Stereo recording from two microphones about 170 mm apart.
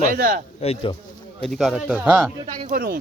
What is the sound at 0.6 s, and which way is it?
Speech, 35° left (ahead or behind).